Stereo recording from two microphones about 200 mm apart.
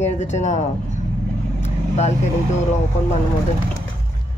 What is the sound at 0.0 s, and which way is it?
Speech, 35° left (ahead or behind).